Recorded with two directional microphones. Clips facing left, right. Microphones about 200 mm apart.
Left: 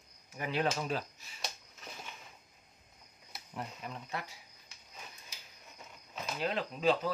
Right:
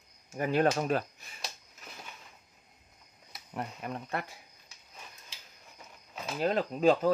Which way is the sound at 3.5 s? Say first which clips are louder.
Right 5 dB; 60° right (ahead or behind).